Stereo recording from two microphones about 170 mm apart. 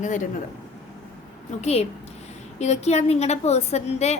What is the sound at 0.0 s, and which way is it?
Speech, 50° left (ahead or behind).